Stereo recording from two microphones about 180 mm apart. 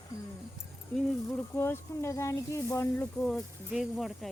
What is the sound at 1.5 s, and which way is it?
Speech, 15° left (ahead or behind).